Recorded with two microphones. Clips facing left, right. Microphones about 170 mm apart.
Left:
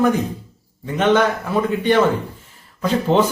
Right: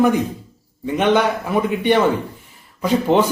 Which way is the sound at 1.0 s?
15° right (ahead or behind).